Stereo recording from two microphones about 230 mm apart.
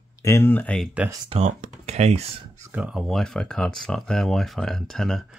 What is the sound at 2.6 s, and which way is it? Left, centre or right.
Speech, centre.